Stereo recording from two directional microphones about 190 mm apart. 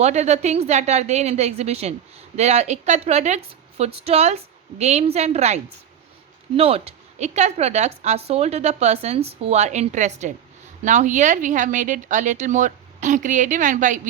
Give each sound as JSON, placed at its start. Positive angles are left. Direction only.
{"t": 0.0, "sound": "a woman's voice", "side_deg": -35}
{"t": 6.6, "sound": "a woman's voice", "side_deg": -30}